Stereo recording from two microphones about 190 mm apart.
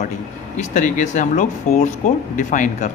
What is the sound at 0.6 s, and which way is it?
Speech, 40° left (ahead or behind).